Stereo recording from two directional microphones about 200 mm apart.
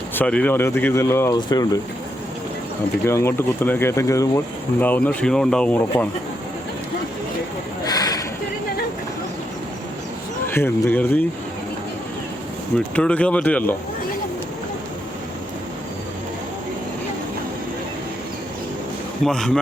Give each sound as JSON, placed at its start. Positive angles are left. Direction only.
{"t": 0.1, "sound": "speech", "side_deg": 10}
{"t": 3.1, "sound": "speech", "side_deg": 15}
{"t": 7.9, "sound": "a sound", "side_deg": 20}
{"t": 10.4, "sound": "speech", "side_deg": 10}
{"t": 12.7, "sound": "speech", "side_deg": 5}
{"t": 19.2, "sound": "a man's voice", "side_deg": 0}